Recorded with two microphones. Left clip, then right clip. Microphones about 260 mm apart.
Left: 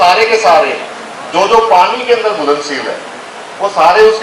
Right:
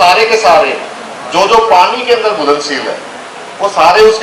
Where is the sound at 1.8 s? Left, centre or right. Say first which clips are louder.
Right 1 dB; centre.